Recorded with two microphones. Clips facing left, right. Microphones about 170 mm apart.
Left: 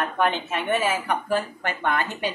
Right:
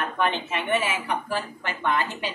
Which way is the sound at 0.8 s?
45° left (ahead or behind).